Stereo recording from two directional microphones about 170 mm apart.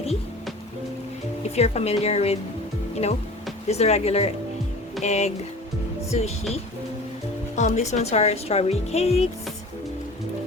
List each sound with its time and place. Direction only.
1.5 s a woman's voice: 40° left (ahead or behind)
7.5 s a woman's voice: 45° left (ahead or behind)